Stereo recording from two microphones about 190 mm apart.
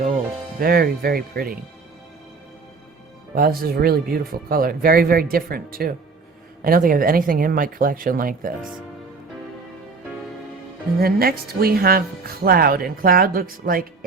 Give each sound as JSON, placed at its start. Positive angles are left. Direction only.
{"t": 0.6, "sound": "speech", "side_deg": -50}
{"t": 3.3, "sound": "speech", "side_deg": -50}
{"t": 11.0, "sound": "speech", "side_deg": -50}